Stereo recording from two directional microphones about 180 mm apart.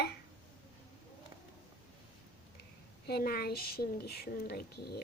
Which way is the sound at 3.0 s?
60° left (ahead or behind).